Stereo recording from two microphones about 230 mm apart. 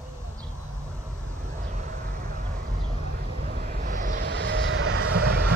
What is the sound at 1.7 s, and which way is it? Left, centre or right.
Vehicle, right.